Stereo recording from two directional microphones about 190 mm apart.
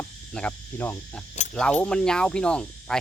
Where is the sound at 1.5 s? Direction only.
5° left (ahead or behind).